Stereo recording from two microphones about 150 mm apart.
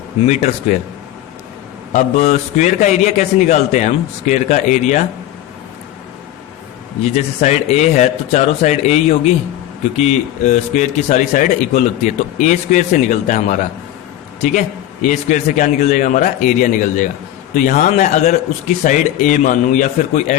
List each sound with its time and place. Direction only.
0.3 s a man's voice: 45° left (ahead or behind)
1.9 s a man's voice: 50° left (ahead or behind)
7.2 s a man's voice: 50° left (ahead or behind)
15.0 s a man's voice: 55° left (ahead or behind)